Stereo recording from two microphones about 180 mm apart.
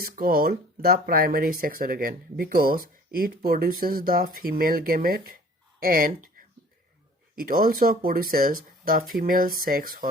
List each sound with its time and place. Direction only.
0.0 s speech: 55° right (ahead or behind)
7.3 s speech: 55° right (ahead or behind)